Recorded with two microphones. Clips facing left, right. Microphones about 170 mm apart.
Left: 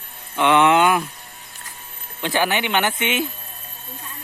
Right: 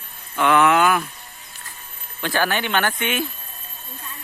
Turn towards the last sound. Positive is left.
turn(degrees=20)  # may be behind; listen again after turning